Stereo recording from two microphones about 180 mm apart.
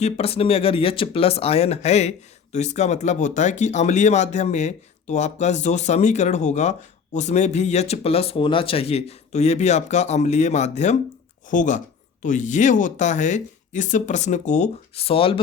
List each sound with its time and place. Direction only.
0.0 s speech: 35° left (ahead or behind)